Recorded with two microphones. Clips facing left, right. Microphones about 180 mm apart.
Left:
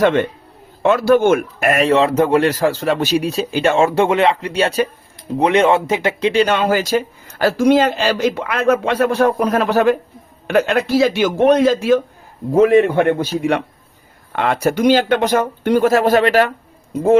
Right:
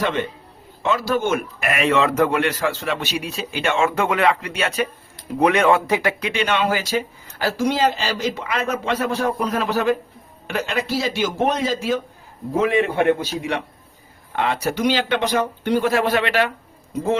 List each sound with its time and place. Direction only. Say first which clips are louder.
0.0 s a man's voice: left 8 dB; 55° left (ahead or behind)
12.5 s speech: left 8 dB; 45° left (ahead or behind)
14.3 s speech: left 5 dB; 55° left (ahead or behind)